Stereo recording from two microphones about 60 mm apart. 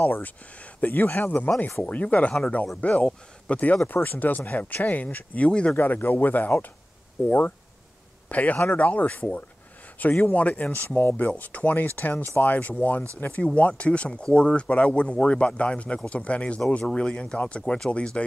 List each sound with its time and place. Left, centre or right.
0.0 s speech: left
5.8 s speech: left; by 18.2 s centre